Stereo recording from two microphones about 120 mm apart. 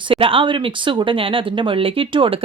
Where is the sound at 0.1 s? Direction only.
50° right (ahead or behind).